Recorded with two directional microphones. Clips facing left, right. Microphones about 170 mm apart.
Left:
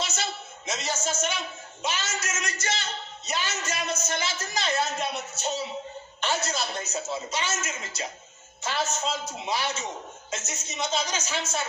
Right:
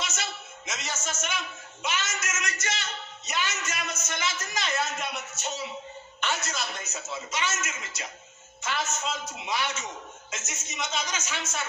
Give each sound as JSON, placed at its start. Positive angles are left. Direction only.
{"t": 0.0, "sound": "a woman's voice", "side_deg": 30}